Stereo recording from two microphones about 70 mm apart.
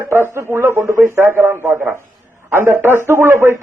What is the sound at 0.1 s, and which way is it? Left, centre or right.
A man's voice, right.